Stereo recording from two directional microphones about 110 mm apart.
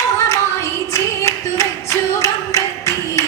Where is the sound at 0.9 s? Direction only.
25° left (ahead or behind).